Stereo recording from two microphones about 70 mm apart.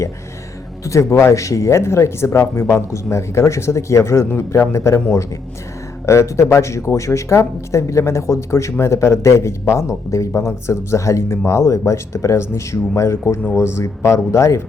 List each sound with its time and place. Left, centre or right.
0.9 s a man's voice: left
6.1 s a man's voice: left